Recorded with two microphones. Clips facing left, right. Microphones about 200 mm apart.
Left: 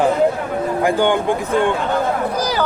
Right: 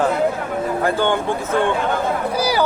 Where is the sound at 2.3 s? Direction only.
10° right (ahead or behind).